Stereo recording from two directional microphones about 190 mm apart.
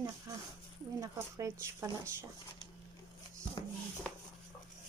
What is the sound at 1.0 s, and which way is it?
Speech, 15° right (ahead or behind).